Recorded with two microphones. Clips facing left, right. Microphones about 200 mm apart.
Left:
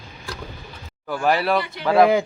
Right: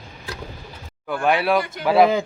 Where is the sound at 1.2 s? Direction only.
Centre (ahead or behind).